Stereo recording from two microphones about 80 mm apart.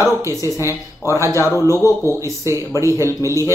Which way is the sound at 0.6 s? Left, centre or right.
Right.